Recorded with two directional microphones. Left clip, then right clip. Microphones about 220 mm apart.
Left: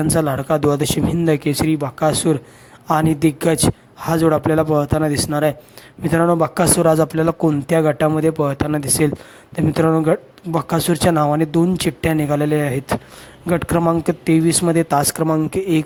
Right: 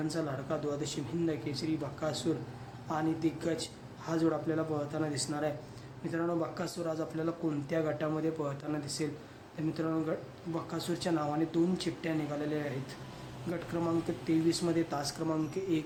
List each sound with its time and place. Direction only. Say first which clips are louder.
0.1 s speech: left 18 dB; 45° left (ahead or behind)